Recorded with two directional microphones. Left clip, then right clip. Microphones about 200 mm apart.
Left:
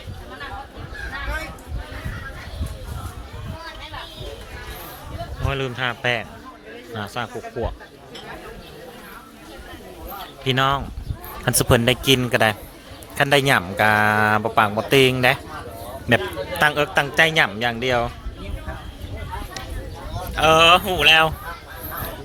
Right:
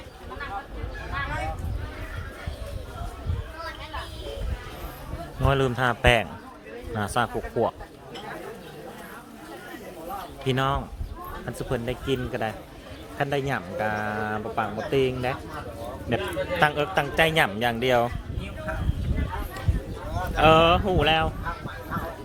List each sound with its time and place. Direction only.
5.4 s a man's voice: 25° right (ahead or behind)
10.4 s speech: 5° left (ahead or behind)
11.4 s a man's voice: 35° left (ahead or behind); by 18.1 s centre (ahead or behind)
20.3 s speech: 10° left (ahead or behind)